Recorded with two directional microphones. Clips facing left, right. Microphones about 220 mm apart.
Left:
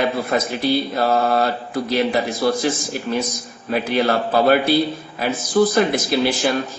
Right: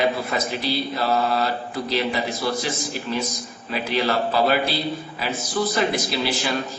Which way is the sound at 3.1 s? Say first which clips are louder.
Left 5 dB; 55° left (ahead or behind).